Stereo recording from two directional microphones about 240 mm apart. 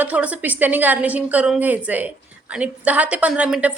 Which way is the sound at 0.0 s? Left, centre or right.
Centre.